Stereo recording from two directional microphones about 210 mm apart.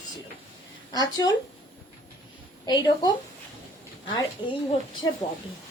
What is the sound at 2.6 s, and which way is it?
Speech, 20° left (ahead or behind).